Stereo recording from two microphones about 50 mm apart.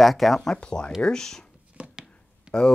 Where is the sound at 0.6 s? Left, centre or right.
Centre.